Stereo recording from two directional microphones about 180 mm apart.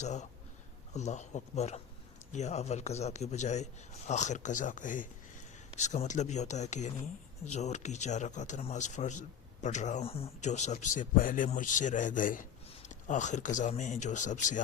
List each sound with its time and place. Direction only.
0.0 s a man's voice: 40° left (ahead or behind)